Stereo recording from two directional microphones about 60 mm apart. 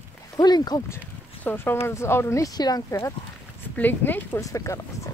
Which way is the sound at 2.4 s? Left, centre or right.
Left.